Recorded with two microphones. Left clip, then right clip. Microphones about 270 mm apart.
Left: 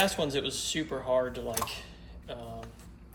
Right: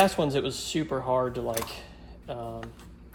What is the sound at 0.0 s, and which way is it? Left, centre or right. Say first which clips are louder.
Speech: right 5 dB; centre.